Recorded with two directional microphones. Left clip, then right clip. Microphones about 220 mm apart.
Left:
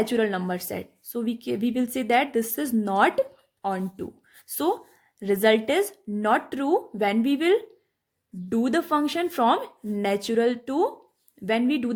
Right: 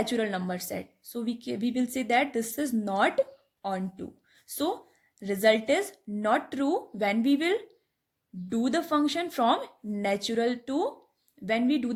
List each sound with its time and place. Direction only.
0.0 s speech: 20° left (ahead or behind)